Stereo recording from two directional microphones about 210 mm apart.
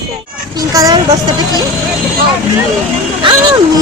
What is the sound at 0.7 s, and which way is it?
Speech, 15° right (ahead or behind).